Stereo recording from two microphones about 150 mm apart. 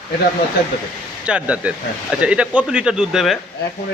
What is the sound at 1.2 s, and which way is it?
Speech, 10° right (ahead or behind).